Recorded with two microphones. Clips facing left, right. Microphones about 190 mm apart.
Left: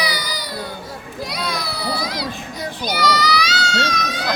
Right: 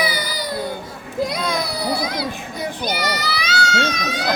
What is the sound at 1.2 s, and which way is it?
A child's voice, 50° right (ahead or behind).